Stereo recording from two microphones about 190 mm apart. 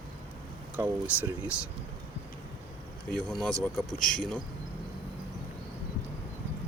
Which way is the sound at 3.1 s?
Centre (ahead or behind).